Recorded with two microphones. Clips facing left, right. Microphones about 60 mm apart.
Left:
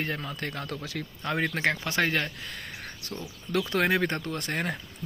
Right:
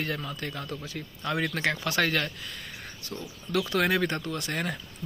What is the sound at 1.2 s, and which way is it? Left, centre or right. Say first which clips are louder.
Speech: left 1 dB; left.